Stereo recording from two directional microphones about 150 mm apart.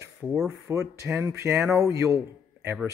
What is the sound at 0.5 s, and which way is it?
Speech, 20° right (ahead or behind).